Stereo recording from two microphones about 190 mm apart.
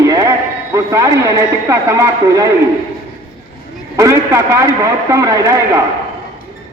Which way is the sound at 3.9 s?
15° right (ahead or behind).